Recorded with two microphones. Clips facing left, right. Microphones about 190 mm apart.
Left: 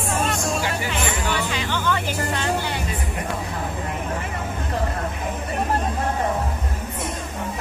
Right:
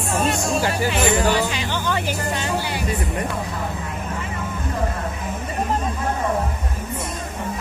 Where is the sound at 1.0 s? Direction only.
35° right (ahead or behind).